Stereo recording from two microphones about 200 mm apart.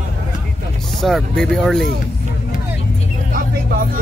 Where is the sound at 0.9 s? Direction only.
Centre (ahead or behind).